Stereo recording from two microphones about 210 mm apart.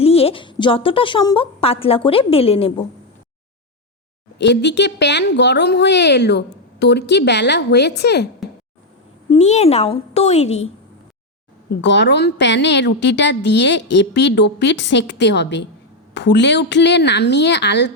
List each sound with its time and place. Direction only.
0.0 s a woman's voice: 30° left (ahead or behind)
4.4 s speech: 55° left (ahead or behind)
9.3 s a child's voice: 30° left (ahead or behind)
11.7 s a woman's voice: 55° left (ahead or behind)